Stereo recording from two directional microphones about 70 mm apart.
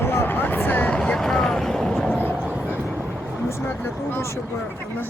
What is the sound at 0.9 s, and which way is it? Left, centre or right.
Vehicle, centre.